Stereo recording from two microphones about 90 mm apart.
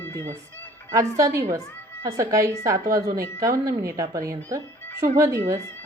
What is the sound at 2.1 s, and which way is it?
A woman's voice, 40° right (ahead or behind).